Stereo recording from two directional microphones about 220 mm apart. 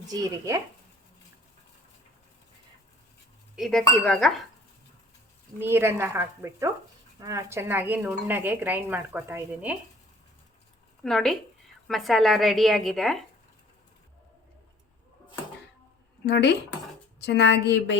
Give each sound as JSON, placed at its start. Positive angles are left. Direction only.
{"t": 0.1, "sound": "speech", "side_deg": -15}
{"t": 3.5, "sound": "speech", "side_deg": 0}
{"t": 5.5, "sound": "speech", "side_deg": -10}
{"t": 11.0, "sound": "speech", "side_deg": 0}
{"t": 16.2, "sound": "a woman's voice", "side_deg": 50}